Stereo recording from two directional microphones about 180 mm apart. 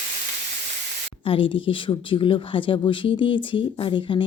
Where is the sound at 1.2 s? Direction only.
30° left (ahead or behind).